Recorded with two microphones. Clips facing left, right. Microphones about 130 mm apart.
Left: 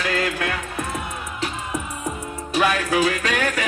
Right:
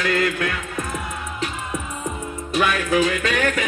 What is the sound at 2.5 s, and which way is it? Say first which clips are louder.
Music: even; 35° left (ahead or behind).